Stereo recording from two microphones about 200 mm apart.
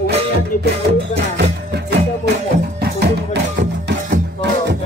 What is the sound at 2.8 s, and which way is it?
Music, 55° right (ahead or behind).